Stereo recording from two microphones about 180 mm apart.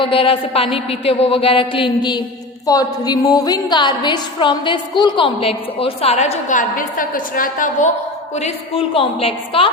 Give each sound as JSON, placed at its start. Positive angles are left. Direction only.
{"t": 0.0, "sound": "a woman's voice", "side_deg": 30}